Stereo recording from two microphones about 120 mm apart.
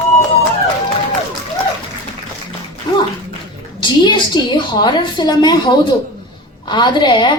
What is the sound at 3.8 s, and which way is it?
A woman's voice, 40° left (ahead or behind).